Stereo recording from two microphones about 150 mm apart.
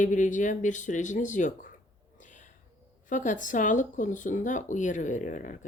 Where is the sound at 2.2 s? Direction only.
60° left (ahead or behind).